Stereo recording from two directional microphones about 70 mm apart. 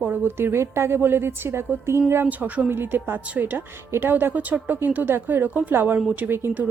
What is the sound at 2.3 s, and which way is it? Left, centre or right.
A woman's voice, right.